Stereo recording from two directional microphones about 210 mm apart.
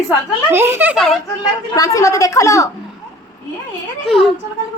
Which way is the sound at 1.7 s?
15° left (ahead or behind).